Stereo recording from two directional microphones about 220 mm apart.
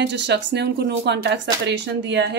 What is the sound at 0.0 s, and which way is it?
Speech, 55° right (ahead or behind).